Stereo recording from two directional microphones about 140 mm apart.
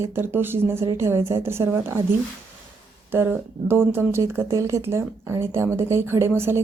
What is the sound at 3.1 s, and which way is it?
Speech, 15° right (ahead or behind).